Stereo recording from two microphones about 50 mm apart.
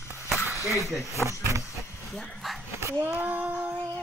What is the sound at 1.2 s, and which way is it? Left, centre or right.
Speech, right.